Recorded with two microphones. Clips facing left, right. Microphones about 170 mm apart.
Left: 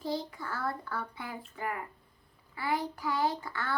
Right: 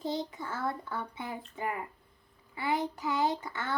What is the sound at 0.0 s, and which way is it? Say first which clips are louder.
A child's voice: right 1 dB; 20° right (ahead or behind).